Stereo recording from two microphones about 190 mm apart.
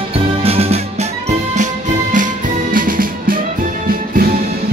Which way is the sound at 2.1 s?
45° right (ahead or behind).